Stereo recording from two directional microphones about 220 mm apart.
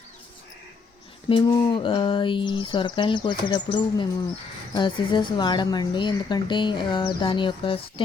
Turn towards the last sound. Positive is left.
turn(degrees=25)  # may be behind; listen again after turning